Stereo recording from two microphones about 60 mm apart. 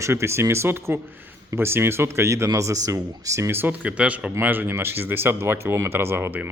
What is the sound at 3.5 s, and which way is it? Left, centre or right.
Speech, right.